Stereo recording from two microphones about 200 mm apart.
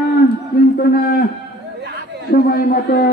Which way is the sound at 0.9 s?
50° left (ahead or behind).